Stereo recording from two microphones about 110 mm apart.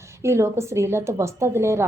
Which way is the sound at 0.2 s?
25° right (ahead or behind).